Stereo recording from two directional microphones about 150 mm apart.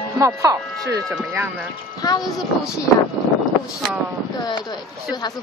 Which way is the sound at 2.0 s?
25° left (ahead or behind).